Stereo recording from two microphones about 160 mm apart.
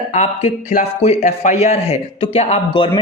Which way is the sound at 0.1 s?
45° left (ahead or behind).